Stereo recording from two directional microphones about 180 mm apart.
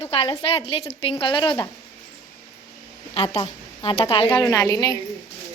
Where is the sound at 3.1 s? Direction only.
30° left (ahead or behind).